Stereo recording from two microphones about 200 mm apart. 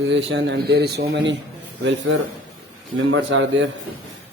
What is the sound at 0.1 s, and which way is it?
Speech, 65° right (ahead or behind).